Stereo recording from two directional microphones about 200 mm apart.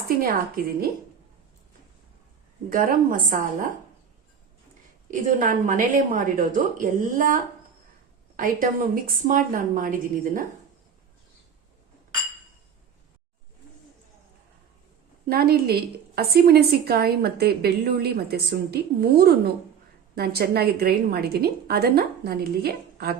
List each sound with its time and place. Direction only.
0.2 s a woman's voice: 45° right (ahead or behind)
2.6 s a woman's voice: 45° right (ahead or behind)
5.1 s a woman's voice: 40° right (ahead or behind)
8.4 s a woman's voice: 45° right (ahead or behind)
15.3 s a woman's voice: 50° right (ahead or behind)